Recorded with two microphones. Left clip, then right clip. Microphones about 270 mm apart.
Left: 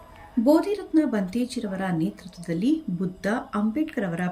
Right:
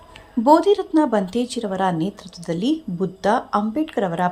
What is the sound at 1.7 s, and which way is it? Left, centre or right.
Speech, right.